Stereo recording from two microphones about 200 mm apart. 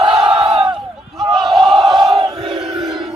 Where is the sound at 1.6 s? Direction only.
25° right (ahead or behind).